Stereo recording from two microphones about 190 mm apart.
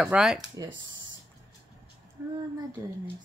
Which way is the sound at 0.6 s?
75° right (ahead or behind).